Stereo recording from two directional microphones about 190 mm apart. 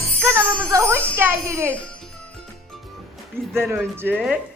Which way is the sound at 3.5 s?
15° right (ahead or behind).